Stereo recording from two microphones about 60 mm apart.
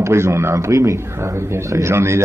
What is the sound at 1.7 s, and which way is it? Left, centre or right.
Speech, right.